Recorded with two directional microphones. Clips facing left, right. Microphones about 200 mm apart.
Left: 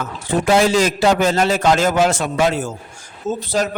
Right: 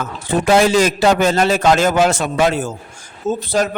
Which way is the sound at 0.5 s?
65° right (ahead or behind).